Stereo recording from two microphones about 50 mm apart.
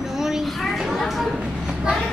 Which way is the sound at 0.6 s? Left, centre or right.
Centre.